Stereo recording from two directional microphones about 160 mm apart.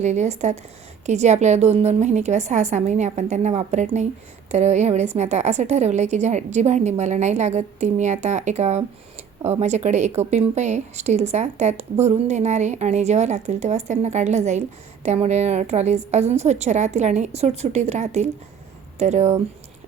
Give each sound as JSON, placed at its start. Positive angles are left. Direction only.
{"t": 0.0, "sound": "speech", "side_deg": -45}